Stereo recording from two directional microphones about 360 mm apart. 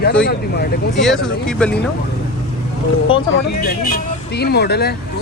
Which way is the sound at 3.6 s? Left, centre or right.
Left.